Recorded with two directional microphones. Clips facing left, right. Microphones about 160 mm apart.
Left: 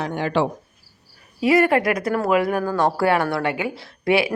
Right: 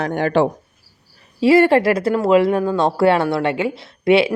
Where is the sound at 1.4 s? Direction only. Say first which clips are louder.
Right 5 dB; 30° right (ahead or behind).